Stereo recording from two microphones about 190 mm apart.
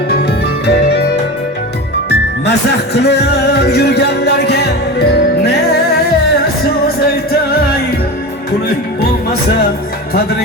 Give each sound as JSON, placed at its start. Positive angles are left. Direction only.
{"t": 0.1, "sound": "music", "side_deg": 60}